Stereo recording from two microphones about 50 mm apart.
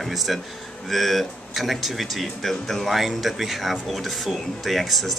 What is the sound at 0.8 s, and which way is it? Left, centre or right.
Speech, centre.